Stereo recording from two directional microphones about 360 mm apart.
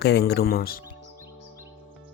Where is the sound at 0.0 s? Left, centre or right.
Left.